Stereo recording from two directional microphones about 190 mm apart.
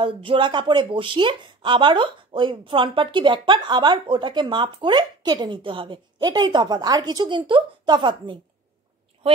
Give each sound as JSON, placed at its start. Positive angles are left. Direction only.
{"t": 0.0, "sound": "speech", "side_deg": -25}